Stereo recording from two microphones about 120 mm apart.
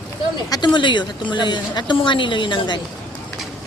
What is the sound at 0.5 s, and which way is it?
A woman's voice, 40° left (ahead or behind).